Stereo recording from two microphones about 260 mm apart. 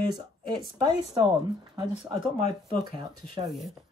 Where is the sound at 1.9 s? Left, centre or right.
Centre.